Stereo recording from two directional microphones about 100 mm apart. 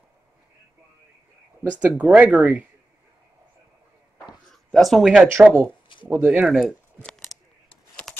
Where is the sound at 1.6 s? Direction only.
15° right (ahead or behind).